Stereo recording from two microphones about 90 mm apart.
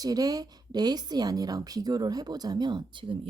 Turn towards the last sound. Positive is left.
turn(degrees=-65)  # may be behind; listen again after turning